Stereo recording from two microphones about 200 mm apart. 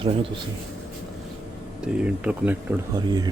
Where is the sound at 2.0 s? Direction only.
5° right (ahead or behind).